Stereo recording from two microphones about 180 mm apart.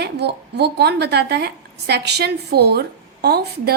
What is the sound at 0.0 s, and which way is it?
A woman's voice, 70° right (ahead or behind).